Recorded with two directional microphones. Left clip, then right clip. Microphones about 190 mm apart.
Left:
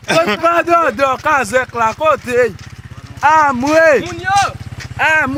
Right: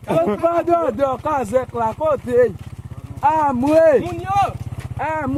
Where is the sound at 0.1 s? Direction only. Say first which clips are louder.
Left 5 dB; 5° left (ahead or behind).